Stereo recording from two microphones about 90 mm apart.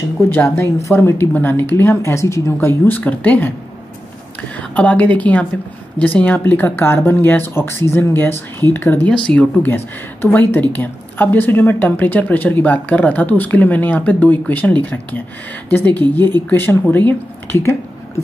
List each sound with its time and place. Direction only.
0.3 s a woman's voice: 25° left (ahead or behind)
2.5 s a woman's voice: 20° left (ahead or behind)
9.1 s a woman's voice: 10° left (ahead or behind)